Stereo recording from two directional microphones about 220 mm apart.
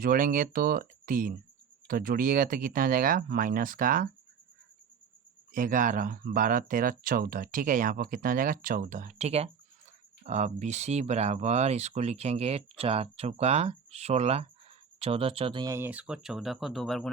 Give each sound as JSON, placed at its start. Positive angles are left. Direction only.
{"t": 0.0, "sound": "speech", "side_deg": -40}
{"t": 5.5, "sound": "speech", "side_deg": -40}